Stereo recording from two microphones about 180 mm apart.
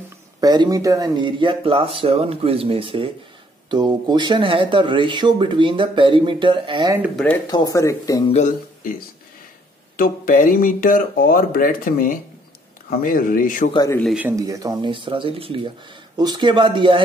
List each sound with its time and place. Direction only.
0.4 s speech: 20° right (ahead or behind)
7.4 s speech: 20° left (ahead or behind)
8.3 s speech: 45° left (ahead or behind)
9.9 s speech: 50° left (ahead or behind)
13.7 s speech: 15° left (ahead or behind)
14.0 s speech: 5° right (ahead or behind)
14.3 s speech: 20° right (ahead or behind)